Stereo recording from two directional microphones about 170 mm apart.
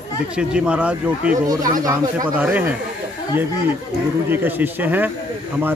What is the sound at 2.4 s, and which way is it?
Speech, 10° right (ahead or behind).